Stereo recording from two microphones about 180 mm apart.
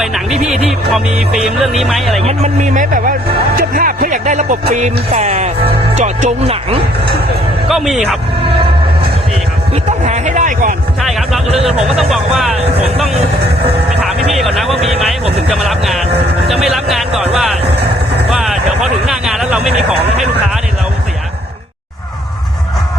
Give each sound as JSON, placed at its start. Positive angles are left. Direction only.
{"t": 0.0, "sound": "music", "side_deg": 0}
{"t": 2.2, "sound": "speech", "side_deg": -40}
{"t": 3.5, "sound": "music", "side_deg": -50}
{"t": 7.7, "sound": "music", "side_deg": 0}
{"t": 8.4, "sound": "music", "side_deg": -25}
{"t": 10.1, "sound": "a sound", "side_deg": -40}
{"t": 11.6, "sound": "music", "side_deg": 0}
{"t": 14.3, "sound": "vehicle", "side_deg": 0}
{"t": 15.4, "sound": "music", "side_deg": 0}
{"t": 18.3, "sound": "a sound", "side_deg": 0}
{"t": 19.6, "sound": "music", "side_deg": -35}